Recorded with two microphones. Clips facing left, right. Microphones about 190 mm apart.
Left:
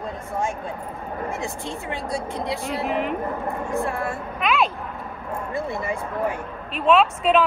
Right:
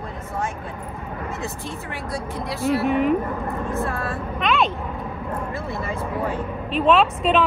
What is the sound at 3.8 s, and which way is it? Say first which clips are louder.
Speech: left 1 dB; 15° left (ahead or behind).